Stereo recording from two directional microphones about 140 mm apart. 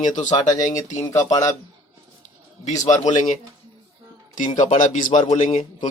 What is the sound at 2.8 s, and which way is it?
Speech, 60° left (ahead or behind).